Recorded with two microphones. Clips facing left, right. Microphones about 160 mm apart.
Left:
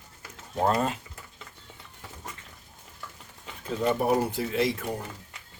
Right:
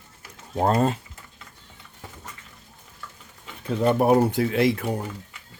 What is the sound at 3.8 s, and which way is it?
Speech, 60° right (ahead or behind).